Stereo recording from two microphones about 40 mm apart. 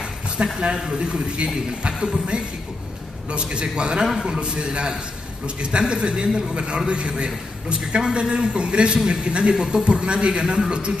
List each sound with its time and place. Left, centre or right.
0.6 s a man's voice: right
4.1 s a man's voice: centre
4.4 s a man's voice: right